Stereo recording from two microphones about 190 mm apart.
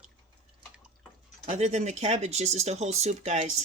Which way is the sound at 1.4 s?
35° right (ahead or behind).